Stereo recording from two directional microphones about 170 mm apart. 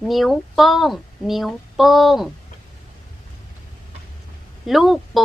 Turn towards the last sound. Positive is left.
turn(degrees=0)  # may be behind; listen again after turning